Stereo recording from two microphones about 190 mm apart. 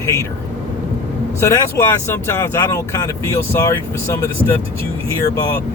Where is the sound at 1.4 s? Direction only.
15° left (ahead or behind).